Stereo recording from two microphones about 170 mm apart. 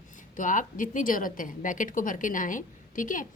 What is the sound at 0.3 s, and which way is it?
A woman's voice, 50° left (ahead or behind).